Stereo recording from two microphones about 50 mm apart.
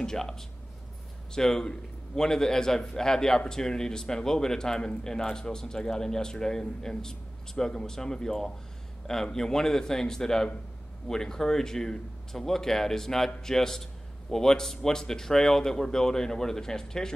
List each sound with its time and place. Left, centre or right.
0.0 s a man's voice: centre